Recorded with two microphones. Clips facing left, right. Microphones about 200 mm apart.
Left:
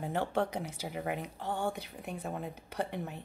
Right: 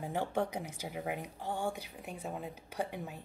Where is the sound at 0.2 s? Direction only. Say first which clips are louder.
Left 1 dB; 10° right (ahead or behind).